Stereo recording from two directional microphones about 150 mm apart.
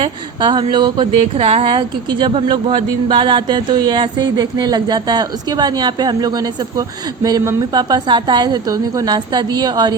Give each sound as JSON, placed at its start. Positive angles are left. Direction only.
{"t": 0.0, "sound": "a woman's voice", "side_deg": -30}